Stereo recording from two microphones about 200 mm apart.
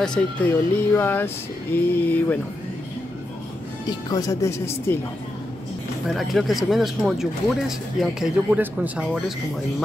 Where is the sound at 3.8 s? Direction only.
20° left (ahead or behind).